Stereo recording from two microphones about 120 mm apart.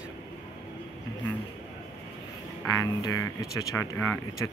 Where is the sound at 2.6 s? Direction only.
30° left (ahead or behind).